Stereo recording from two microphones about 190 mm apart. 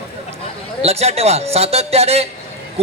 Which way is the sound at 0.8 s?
35° right (ahead or behind).